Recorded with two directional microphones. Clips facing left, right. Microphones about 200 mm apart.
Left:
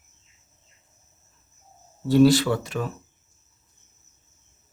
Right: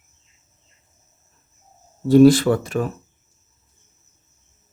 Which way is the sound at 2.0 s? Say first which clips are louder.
Right 5 dB; 50° right (ahead or behind).